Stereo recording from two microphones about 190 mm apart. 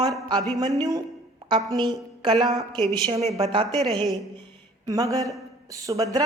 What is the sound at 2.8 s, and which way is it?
A woman's voice, 30° right (ahead or behind).